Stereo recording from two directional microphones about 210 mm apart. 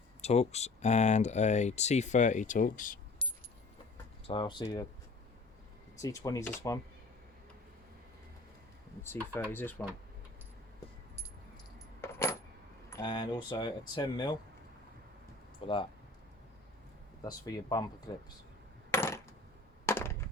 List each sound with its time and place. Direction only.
0.2 s speech: 30° left (ahead or behind)
3.2 s keys jangling: 25° left (ahead or behind)
4.3 s speech: 25° left (ahead or behind)
6.0 s speech: 15° left (ahead or behind)
9.5 s speech: 10° left (ahead or behind)
12.0 s coin: 10° left (ahead or behind)
12.9 s speech: 20° left (ahead or behind)
15.6 s speech: 25° left (ahead or behind)
17.2 s speech: 20° left (ahead or behind)
18.9 s coin: 10° left (ahead or behind)
19.8 s a sound: 10° left (ahead or behind)